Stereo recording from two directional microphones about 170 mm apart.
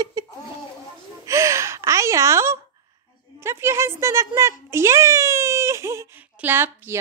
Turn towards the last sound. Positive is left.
turn(degrees=-15)  # may be behind; listen again after turning